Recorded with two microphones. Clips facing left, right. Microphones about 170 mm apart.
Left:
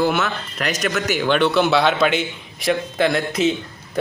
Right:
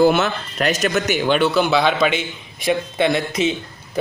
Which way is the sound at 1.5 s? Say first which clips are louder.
Even; centre (ahead or behind).